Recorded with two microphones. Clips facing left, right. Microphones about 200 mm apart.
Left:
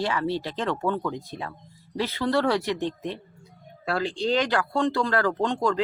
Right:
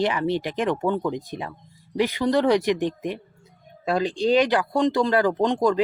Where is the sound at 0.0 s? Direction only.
20° right (ahead or behind).